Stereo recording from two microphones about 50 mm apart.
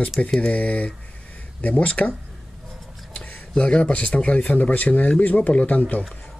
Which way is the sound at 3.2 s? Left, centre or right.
Left.